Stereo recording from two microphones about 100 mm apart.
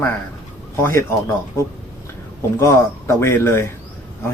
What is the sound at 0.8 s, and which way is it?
Speech, 25° left (ahead or behind).